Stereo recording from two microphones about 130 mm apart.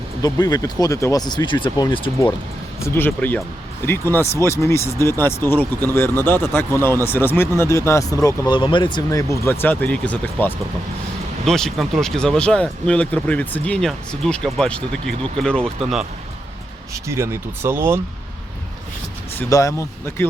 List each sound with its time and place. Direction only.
0.2 s speech: 30° left (ahead or behind)
2.8 s speech: 15° left (ahead or behind)
8.4 s speech: 40° left (ahead or behind)
9.0 s speech: 25° left (ahead or behind); by 16.0 s 5° left (ahead or behind)
16.9 s speech: 20° right (ahead or behind)
19.5 s speech: 25° left (ahead or behind)